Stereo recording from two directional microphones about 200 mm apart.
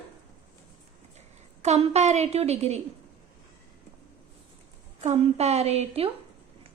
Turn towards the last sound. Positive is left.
turn(degrees=-30)  # may be behind; listen again after turning